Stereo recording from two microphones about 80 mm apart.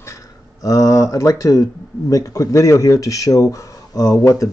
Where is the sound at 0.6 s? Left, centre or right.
Left.